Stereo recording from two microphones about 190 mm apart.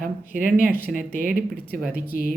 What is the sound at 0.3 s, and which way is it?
Speech, 50° right (ahead or behind).